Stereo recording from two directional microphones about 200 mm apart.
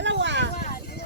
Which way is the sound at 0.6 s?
50° left (ahead or behind).